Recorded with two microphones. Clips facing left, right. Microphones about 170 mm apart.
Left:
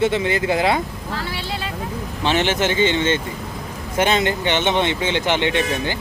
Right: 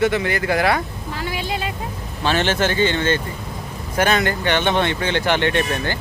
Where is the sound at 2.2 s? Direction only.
15° left (ahead or behind).